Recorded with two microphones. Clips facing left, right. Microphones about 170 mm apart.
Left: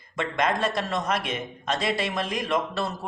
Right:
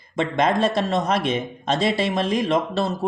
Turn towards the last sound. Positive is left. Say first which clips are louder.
# right 6 dB
turn(degrees=-25)  # may be behind; listen again after turning